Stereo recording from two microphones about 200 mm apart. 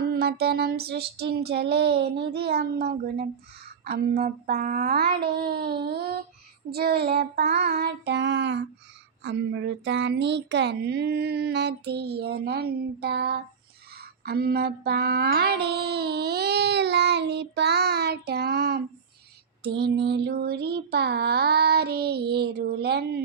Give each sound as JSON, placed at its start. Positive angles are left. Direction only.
{"t": 0.0, "sound": "child singing", "side_deg": -50}